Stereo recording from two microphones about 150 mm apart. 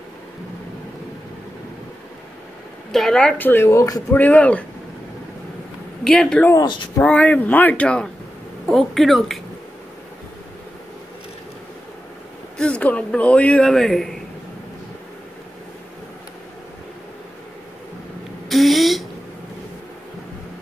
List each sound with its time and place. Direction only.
2.9 s speech: centre (ahead or behind); by 4.0 s 20° left (ahead or behind)
4.1 s speech: 10° left (ahead or behind)
6.0 s speech: 5° left (ahead or behind)
6.5 s speech: 30° left (ahead or behind)
7.0 s speech: 10° left (ahead or behind)
12.5 s a man's voice: 5° left (ahead or behind)
18.5 s a sound: centre (ahead or behind)